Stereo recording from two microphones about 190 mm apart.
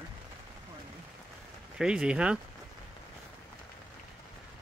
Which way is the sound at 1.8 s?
5° right (ahead or behind).